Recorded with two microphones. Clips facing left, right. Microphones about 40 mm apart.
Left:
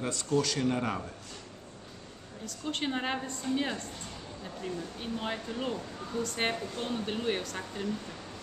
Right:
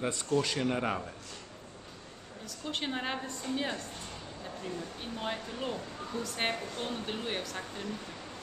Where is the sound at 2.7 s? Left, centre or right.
Centre.